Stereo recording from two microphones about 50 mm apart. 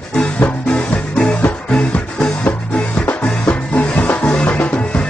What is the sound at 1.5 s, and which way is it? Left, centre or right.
Music, left.